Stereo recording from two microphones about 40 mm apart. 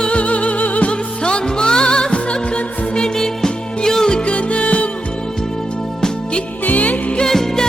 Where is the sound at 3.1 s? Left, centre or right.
Centre; by 4.8 s left.